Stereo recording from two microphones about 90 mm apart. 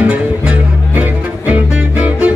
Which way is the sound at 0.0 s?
15° right (ahead or behind).